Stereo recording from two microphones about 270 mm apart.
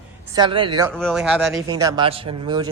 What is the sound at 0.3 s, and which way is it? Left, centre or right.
Speech, centre.